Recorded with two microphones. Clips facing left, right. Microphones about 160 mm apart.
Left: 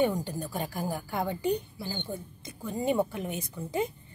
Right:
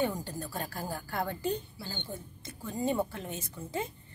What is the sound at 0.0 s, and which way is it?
A woman's voice, 15° left (ahead or behind).